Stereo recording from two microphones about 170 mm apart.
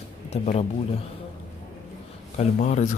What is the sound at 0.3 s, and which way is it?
Speech, 40° left (ahead or behind).